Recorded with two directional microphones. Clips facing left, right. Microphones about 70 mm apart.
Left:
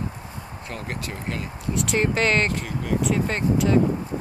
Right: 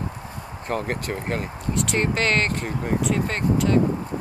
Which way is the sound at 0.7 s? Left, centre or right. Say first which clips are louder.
Right 7 dB; right.